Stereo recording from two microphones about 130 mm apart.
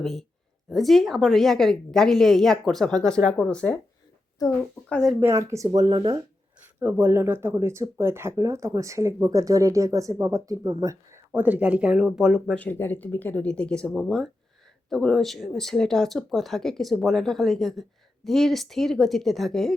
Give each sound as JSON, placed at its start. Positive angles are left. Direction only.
{"t": 0.0, "sound": "speech", "side_deg": 0}
{"t": 4.9, "sound": "speech", "side_deg": 5}
{"t": 5.2, "sound": "speech", "side_deg": -20}
{"t": 6.7, "sound": "speech", "side_deg": -15}
{"t": 11.3, "sound": "speech", "side_deg": -10}
{"t": 12.5, "sound": "speech", "side_deg": 15}